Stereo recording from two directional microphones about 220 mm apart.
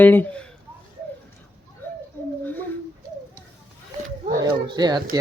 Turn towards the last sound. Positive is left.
turn(degrees=-20)  # may be behind; listen again after turning